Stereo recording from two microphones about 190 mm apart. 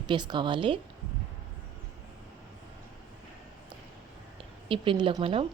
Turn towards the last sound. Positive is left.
turn(degrees=-30)  # may be behind; listen again after turning